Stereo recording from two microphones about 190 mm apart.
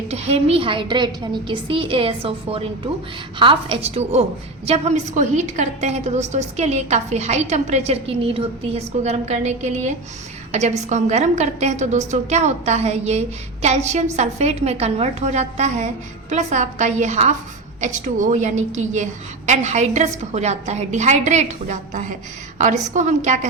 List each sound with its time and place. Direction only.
0.1 s a woman's voice: 35° right (ahead or behind)